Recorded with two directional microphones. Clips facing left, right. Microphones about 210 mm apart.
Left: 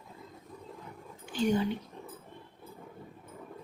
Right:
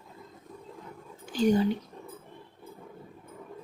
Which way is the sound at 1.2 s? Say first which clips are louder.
Right 4 dB; 40° right (ahead or behind).